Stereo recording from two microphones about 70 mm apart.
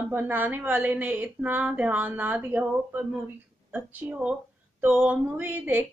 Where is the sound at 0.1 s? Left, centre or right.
Right.